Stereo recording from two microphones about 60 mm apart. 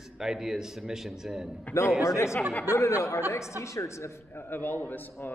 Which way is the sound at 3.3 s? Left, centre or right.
Left.